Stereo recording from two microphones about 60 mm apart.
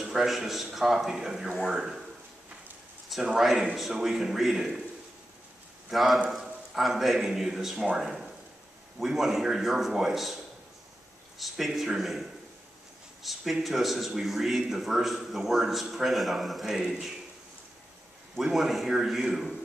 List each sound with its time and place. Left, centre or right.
0.0 s a man's voice: centre
3.3 s a man's voice: centre
5.9 s a man's voice: centre
18.4 s a man's voice: centre